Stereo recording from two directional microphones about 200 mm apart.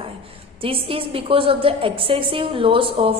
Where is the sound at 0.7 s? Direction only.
25° right (ahead or behind).